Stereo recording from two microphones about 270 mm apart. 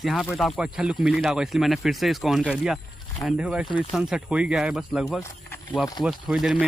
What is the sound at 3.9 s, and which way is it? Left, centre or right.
Speech, centre.